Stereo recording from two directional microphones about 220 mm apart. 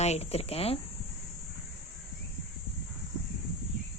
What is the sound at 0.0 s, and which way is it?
Speech, 30° left (ahead or behind).